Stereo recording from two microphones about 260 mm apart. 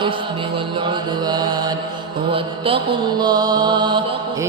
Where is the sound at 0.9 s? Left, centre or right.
Centre.